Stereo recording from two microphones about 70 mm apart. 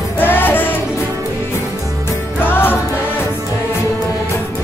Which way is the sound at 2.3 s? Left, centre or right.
Left.